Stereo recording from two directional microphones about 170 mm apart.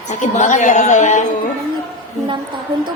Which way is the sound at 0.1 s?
45° left (ahead or behind).